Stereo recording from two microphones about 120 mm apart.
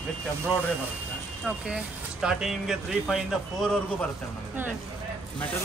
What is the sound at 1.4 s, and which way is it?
Speech, 5° right (ahead or behind).